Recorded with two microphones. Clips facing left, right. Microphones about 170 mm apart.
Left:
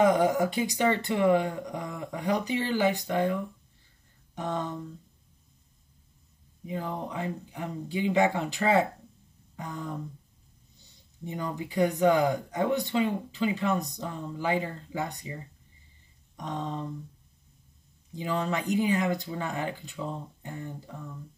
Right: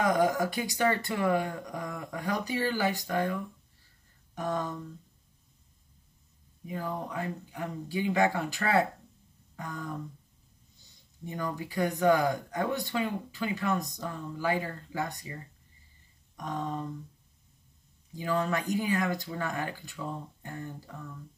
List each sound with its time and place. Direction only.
0.0 s speech: 25° left (ahead or behind)
4.4 s speech: 25° left (ahead or behind)
6.7 s speech: 20° left (ahead or behind)
11.2 s speech: 20° left (ahead or behind)
18.1 s speech: 25° left (ahead or behind)